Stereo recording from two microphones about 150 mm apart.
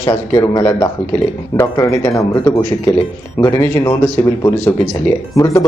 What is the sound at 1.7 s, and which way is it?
Speech, 20° left (ahead or behind).